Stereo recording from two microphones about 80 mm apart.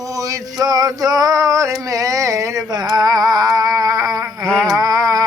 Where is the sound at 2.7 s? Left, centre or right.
Right.